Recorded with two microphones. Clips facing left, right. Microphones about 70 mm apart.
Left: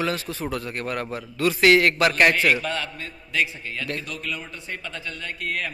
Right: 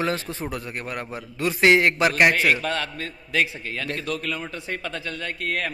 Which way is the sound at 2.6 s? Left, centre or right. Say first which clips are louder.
Right 2 dB; right.